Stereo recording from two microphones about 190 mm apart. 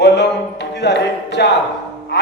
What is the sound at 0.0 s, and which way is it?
Music, 65° left (ahead or behind).